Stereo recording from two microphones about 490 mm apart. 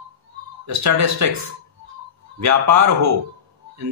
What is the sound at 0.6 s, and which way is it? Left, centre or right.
Speech, right.